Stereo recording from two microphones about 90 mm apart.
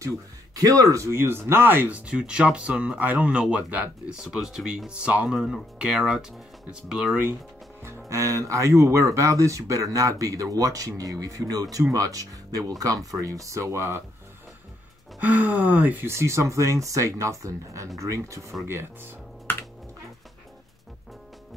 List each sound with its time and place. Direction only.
0.6 s speech: 40° right (ahead or behind); by 7.2 s 5° right (ahead or behind)
8.1 s speech: 35° right (ahead or behind)
15.1 s speech: 15° right (ahead or behind)
16.1 s speech: 30° right (ahead or behind)
18.7 s speech: 25° right (ahead or behind)